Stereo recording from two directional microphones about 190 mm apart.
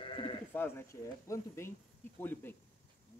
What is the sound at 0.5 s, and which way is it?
Speech, 10° left (ahead or behind).